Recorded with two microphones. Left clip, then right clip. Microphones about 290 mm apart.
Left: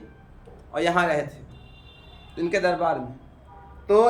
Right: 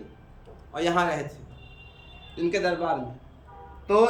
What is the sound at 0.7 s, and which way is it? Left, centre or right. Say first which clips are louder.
Speech: left 3 dB; centre.